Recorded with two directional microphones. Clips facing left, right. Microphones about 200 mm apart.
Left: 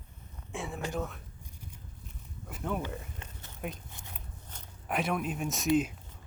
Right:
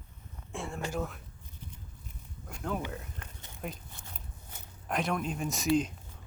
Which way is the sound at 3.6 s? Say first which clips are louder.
Left 1 dB; centre (ahead or behind).